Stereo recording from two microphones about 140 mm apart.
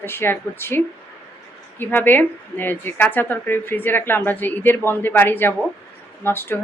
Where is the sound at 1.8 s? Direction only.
15° left (ahead or behind).